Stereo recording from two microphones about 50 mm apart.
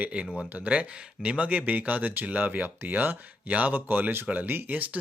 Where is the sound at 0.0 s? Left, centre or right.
Right.